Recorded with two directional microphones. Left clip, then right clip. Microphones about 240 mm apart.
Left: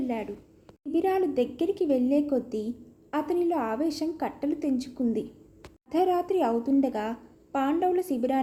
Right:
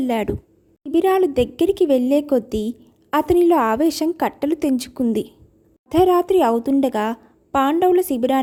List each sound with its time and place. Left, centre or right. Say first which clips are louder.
0.9 s a woman's voice: right 9 dB; right